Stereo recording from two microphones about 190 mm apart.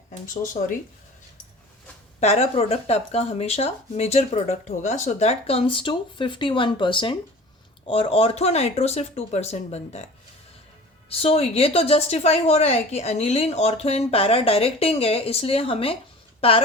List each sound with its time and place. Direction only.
2.2 s speech: 35° left (ahead or behind)
11.1 s speech: 30° left (ahead or behind)